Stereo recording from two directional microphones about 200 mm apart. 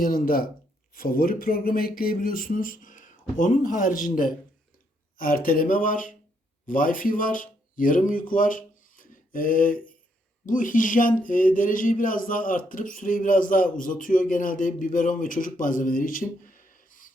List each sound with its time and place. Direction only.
0.0 s speech: 45° left (ahead or behind)